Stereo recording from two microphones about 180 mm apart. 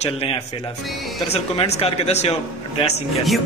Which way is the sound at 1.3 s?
35° left (ahead or behind).